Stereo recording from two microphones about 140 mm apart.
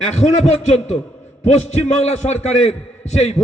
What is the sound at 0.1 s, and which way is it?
Speech, 55° left (ahead or behind).